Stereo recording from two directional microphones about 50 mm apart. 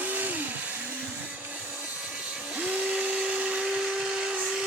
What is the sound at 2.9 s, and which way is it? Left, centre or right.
Blender, centre.